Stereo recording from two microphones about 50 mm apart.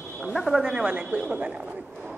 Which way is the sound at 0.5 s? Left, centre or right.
Centre.